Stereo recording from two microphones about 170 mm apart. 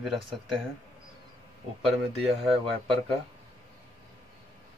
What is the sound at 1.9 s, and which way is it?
Speech, centre (ahead or behind).